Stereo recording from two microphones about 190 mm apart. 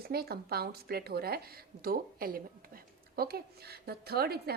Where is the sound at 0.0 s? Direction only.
55° right (ahead or behind).